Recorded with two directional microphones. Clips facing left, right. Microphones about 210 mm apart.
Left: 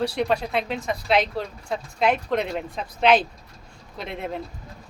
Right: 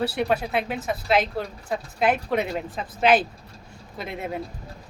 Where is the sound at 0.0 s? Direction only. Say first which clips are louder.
Even; 5° right (ahead or behind).